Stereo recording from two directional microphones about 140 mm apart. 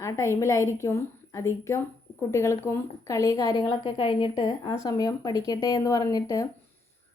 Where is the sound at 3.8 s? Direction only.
40° left (ahead or behind).